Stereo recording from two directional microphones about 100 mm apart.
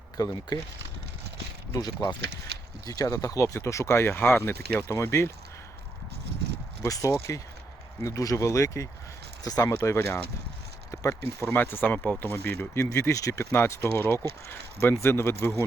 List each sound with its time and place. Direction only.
0.2 s speech: 40° left (ahead or behind)
1.7 s speech: 40° left (ahead or behind)
6.8 s speech: 35° left (ahead or behind)
11.4 s speech: 20° left (ahead or behind)